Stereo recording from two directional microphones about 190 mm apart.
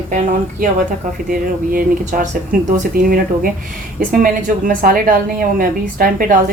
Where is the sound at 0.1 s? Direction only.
45° right (ahead or behind).